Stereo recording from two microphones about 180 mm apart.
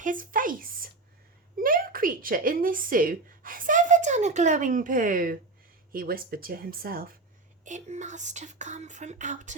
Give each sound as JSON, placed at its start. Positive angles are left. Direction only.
{"t": 0.0, "sound": "a sound", "side_deg": -50}
{"t": 5.9, "sound": "speech", "side_deg": -55}
{"t": 7.6, "sound": "speech", "side_deg": -45}